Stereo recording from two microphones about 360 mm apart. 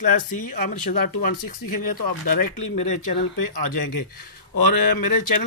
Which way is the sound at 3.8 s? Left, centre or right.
Left.